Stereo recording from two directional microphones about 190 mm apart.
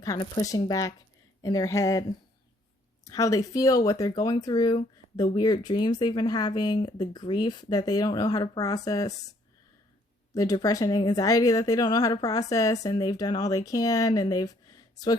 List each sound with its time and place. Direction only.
0.0 s a woman's voice: 20° left (ahead or behind)
10.3 s a woman's voice: 20° left (ahead or behind)